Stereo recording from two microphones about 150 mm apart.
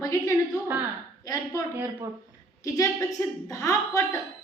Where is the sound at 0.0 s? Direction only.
20° left (ahead or behind).